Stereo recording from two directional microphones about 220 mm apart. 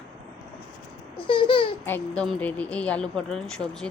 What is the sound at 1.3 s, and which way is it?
Babbling, 25° left (ahead or behind).